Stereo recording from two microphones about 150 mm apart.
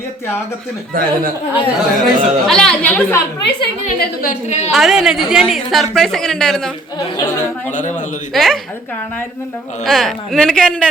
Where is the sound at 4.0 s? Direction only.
70° left (ahead or behind); by 4.7 s 50° left (ahead or behind).